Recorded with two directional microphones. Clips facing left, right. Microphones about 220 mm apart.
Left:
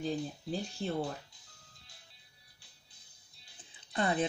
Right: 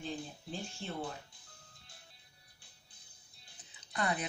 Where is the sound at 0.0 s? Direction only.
40° left (ahead or behind).